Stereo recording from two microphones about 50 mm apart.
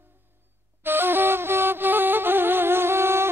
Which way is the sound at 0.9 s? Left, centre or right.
Right.